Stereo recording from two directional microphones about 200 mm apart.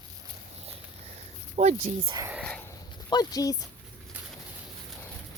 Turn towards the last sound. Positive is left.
turn(degrees=20)  # may be behind; listen again after turning